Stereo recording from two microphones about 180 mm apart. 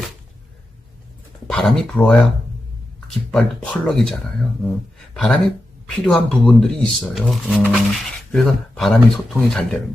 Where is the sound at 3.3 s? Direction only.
5° left (ahead or behind).